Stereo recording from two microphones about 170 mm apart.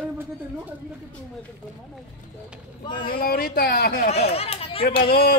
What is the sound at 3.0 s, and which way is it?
Speech, 60° left (ahead or behind).